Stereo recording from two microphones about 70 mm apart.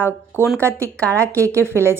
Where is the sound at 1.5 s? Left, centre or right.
Right.